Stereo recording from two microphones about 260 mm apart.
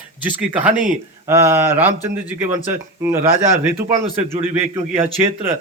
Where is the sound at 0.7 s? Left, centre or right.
Right.